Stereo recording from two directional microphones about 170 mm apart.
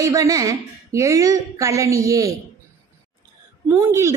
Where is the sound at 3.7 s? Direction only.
15° right (ahead or behind).